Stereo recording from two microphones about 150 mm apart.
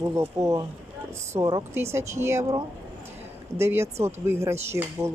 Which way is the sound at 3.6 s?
15° right (ahead or behind).